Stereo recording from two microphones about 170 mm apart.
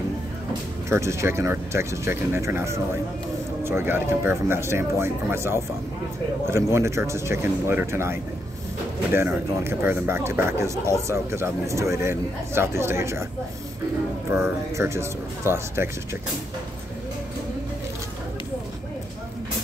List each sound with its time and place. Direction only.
0.8 s speech: 15° right (ahead or behind)
14.3 s speech: 15° right (ahead or behind)